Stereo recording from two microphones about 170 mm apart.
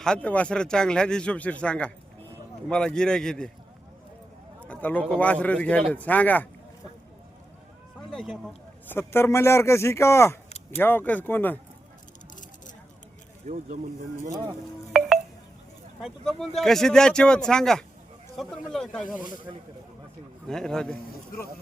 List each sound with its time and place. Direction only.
0.0 s speech: 5° left (ahead or behind)
4.7 s a man's voice: 10° left (ahead or behind)
8.1 s speech: centre (ahead or behind)
8.9 s a man's voice: 15° left (ahead or behind)
13.5 s speech: 45° right (ahead or behind)
16.0 s speech: centre (ahead or behind)
20.5 s speech: 5° left (ahead or behind)